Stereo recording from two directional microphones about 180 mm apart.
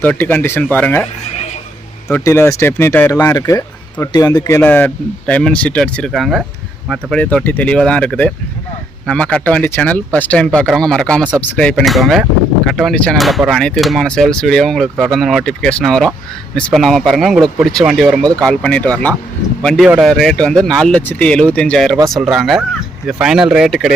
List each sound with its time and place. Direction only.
0.0 s speech: 10° left (ahead or behind)
2.0 s speech: 10° left (ahead or behind)